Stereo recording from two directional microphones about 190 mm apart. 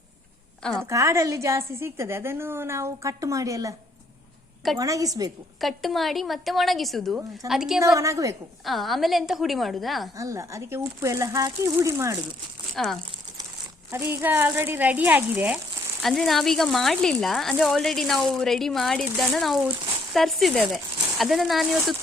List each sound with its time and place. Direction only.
0.6 s a woman's voice: 5° left (ahead or behind)
0.9 s a woman's voice: 15° right (ahead or behind)
4.8 s a woman's voice: 20° right (ahead or behind)
5.5 s speech: centre (ahead or behind)
7.8 s a woman's voice: 15° right (ahead or behind)
8.6 s speech: centre (ahead or behind)
10.2 s a woman's voice: 15° right (ahead or behind)
12.7 s speech: centre (ahead or behind)
13.9 s a woman's voice: 10° right (ahead or behind)
16.0 s speech: centre (ahead or behind)